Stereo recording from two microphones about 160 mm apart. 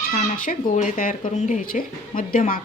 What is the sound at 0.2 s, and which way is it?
Speech, 55° left (ahead or behind).